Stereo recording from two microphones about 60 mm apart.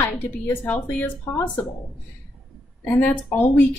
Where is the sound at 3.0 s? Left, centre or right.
Left.